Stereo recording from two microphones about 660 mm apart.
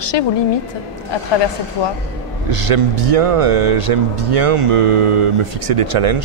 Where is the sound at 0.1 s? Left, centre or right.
Left.